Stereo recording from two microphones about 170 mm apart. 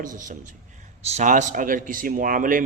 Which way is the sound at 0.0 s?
50° right (ahead or behind).